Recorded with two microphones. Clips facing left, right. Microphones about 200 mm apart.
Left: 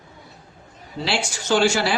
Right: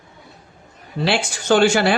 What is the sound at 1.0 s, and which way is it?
Speech, 55° right (ahead or behind).